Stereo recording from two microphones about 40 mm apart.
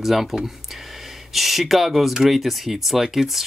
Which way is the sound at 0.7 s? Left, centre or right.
Centre.